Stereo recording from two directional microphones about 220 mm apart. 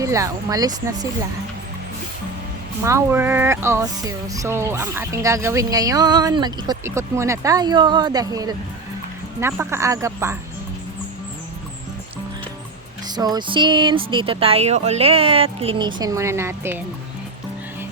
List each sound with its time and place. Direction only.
0.0 s speech: 15° right (ahead or behind)
2.8 s speech: 10° right (ahead or behind)
13.1 s speech: 20° right (ahead or behind)